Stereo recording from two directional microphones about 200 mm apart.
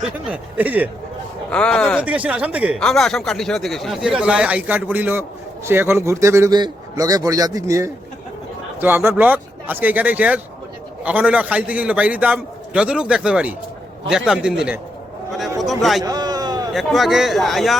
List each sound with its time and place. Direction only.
0.3 s a man's voice: 10° right (ahead or behind)
1.5 s speech: 5° left (ahead or behind)
2.0 s a man's voice: 5° right (ahead or behind)
15.8 s speech: centre (ahead or behind)
16.0 s a sound: 20° right (ahead or behind)
16.7 s speech: centre (ahead or behind)